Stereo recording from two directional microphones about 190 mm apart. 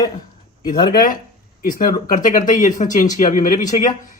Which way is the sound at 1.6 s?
50° left (ahead or behind).